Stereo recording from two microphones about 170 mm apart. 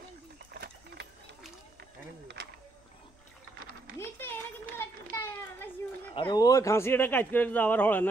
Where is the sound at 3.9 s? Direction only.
15° left (ahead or behind).